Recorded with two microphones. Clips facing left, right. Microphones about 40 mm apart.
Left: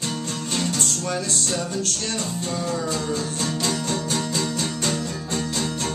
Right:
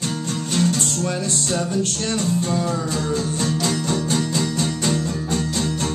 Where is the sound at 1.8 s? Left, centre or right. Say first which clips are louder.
Right 4 dB; right.